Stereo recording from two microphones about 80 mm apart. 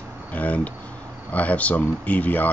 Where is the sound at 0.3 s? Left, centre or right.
Centre.